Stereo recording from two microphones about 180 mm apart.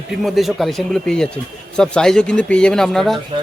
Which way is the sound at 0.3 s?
Centre (ahead or behind).